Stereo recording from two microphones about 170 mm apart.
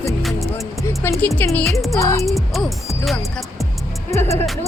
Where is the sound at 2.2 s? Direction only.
Centre (ahead or behind).